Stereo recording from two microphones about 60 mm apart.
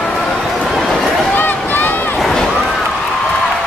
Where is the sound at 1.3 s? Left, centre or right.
Left.